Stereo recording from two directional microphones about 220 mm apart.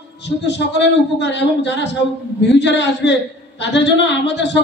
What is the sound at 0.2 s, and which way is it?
Speech, 50° left (ahead or behind).